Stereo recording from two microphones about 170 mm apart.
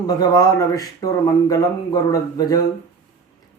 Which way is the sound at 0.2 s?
20° left (ahead or behind).